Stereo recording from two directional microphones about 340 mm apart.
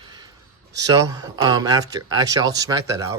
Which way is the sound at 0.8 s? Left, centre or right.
Centre.